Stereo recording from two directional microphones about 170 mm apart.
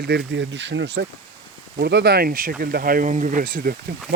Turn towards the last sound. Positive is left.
turn(degrees=-60)  # may be behind; listen again after turning